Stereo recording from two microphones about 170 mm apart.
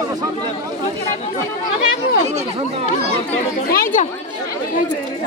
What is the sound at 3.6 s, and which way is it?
Speech, 55° left (ahead or behind).